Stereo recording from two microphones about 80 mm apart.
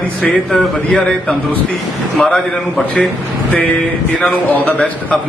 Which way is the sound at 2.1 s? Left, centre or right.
Centre.